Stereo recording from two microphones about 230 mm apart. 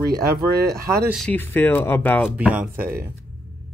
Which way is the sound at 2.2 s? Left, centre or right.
Centre.